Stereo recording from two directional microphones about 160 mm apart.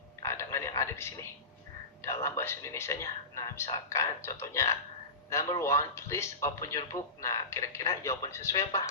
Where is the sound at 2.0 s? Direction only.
15° left (ahead or behind).